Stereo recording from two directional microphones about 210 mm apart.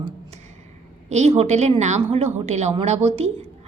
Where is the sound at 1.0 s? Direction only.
30° right (ahead or behind).